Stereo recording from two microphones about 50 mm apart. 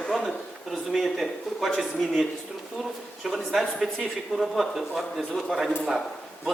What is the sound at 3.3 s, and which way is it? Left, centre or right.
A man's voice, centre.